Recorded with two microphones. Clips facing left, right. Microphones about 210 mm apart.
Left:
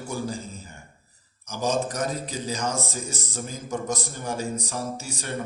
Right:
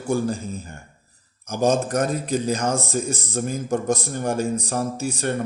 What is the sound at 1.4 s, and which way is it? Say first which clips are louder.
A man's voice: right 6 dB; 55° right (ahead or behind).